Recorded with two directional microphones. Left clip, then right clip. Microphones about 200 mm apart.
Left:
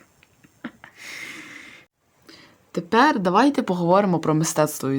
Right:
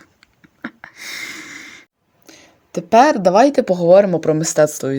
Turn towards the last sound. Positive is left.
turn(degrees=-5)  # may be behind; listen again after turning